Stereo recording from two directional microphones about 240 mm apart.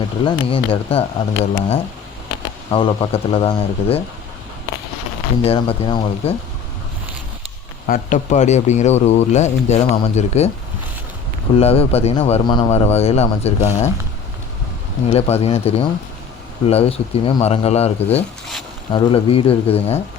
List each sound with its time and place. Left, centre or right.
0.3 s a man's voice: left
5.4 s a man's voice: left
7.9 s a man's voice: left
11.5 s a man's voice: left
15.1 s a man's voice: left